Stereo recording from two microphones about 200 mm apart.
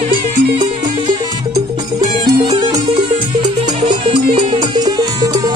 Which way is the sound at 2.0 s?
25° right (ahead or behind).